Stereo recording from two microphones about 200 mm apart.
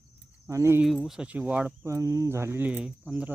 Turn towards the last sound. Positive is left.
turn(degrees=-5)  # may be behind; listen again after turning